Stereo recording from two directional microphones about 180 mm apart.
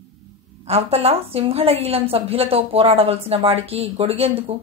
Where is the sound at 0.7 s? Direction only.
35° right (ahead or behind).